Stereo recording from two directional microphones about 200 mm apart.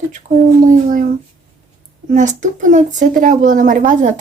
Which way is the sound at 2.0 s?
40° right (ahead or behind).